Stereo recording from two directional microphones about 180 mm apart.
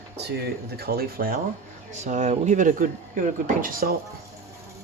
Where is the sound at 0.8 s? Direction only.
60° right (ahead or behind).